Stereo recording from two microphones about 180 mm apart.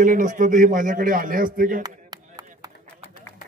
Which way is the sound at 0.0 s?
45° right (ahead or behind).